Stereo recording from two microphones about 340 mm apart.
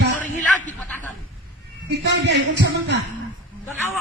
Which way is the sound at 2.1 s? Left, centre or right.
Right.